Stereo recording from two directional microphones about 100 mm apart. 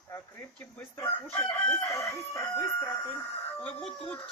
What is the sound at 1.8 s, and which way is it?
Chicken, 30° left (ahead or behind).